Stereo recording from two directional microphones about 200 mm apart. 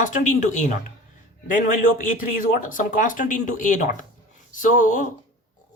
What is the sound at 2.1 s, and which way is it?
Speech, 40° left (ahead or behind).